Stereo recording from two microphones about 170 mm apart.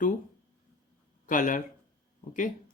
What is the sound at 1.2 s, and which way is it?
Speech, 50° left (ahead or behind).